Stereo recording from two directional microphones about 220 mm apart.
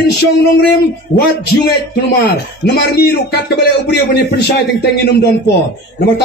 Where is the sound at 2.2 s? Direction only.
50° left (ahead or behind).